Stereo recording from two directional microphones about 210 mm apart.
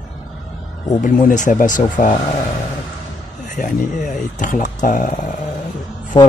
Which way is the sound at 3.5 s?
40° left (ahead or behind).